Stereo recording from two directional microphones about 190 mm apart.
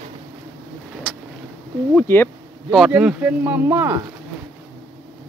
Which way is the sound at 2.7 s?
5° right (ahead or behind).